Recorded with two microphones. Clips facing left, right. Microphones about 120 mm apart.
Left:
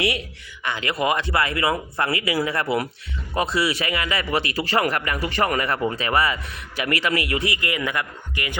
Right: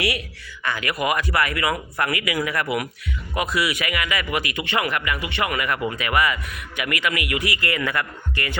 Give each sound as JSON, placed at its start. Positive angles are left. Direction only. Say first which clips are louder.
{"t": 0.0, "sound": "speech", "louder": "left 1 dB", "side_deg": 25}